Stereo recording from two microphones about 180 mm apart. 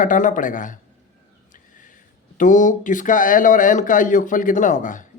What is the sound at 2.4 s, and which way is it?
A man's voice, 45° left (ahead or behind).